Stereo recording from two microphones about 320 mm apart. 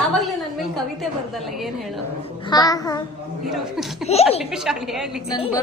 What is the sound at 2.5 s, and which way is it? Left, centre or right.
Speech, centre.